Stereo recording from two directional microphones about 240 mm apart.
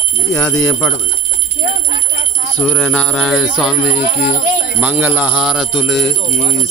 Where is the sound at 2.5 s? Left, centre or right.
Centre.